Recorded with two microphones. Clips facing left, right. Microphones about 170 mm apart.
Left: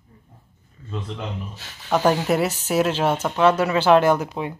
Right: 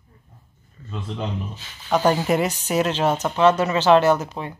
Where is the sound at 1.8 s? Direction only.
5° left (ahead or behind).